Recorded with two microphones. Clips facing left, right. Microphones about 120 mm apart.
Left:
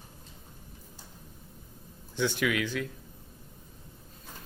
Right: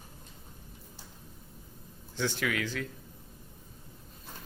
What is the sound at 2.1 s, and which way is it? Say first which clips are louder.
Speech: left 3 dB; 15° left (ahead or behind).